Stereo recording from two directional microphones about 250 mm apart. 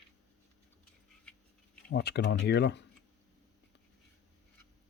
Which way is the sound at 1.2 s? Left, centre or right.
Centre.